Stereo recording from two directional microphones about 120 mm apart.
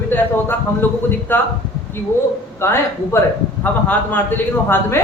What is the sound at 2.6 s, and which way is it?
A man's voice, 20° left (ahead or behind).